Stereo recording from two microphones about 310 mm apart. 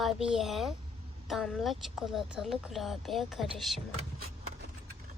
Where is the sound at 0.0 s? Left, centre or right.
Centre.